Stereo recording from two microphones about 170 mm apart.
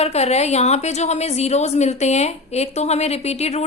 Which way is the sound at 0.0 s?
40° left (ahead or behind).